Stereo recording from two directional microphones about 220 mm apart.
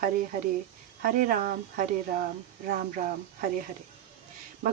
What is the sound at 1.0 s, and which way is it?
Speech, 40° right (ahead or behind).